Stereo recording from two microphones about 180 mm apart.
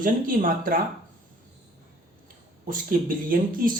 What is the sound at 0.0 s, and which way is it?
Speech, 50° right (ahead or behind).